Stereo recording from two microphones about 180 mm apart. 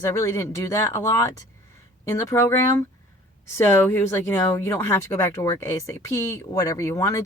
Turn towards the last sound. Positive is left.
turn(degrees=15)  # may be behind; listen again after turning